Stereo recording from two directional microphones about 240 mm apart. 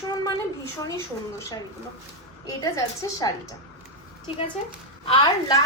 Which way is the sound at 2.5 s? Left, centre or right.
Centre.